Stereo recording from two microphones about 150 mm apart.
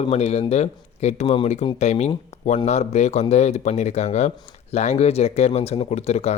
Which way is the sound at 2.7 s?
50° left (ahead or behind).